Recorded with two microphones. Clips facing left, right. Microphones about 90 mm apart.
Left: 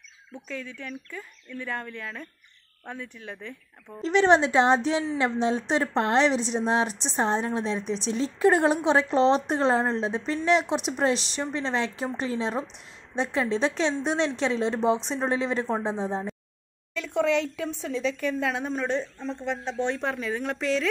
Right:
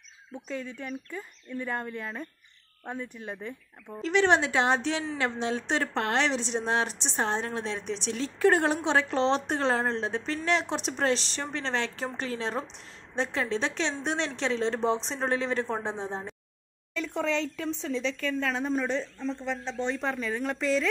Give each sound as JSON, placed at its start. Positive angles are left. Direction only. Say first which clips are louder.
{"t": 0.3, "sound": "speech", "louder": "right 1 dB", "side_deg": -15}
{"t": 4.0, "sound": "a woman's voice", "louder": "left 3 dB", "side_deg": 25}
{"t": 6.9, "sound": "speech", "louder": "left 3 dB", "side_deg": -25}
{"t": 7.4, "sound": "a woman's voice", "louder": "left 4 dB", "side_deg": 20}
{"t": 18.7, "sound": "speech", "louder": "left 1 dB", "side_deg": 0}